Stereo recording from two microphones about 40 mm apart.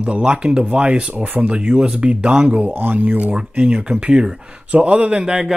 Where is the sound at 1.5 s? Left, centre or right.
Right.